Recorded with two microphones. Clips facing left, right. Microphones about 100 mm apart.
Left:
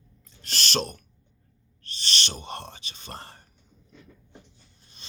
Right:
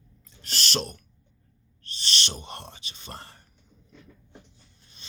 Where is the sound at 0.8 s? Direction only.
40° left (ahead or behind).